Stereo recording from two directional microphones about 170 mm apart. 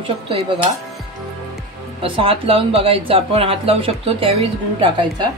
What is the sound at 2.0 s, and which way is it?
Speech, 30° right (ahead or behind).